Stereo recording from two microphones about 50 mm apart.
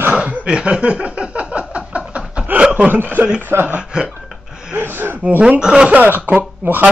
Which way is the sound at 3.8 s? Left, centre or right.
Centre.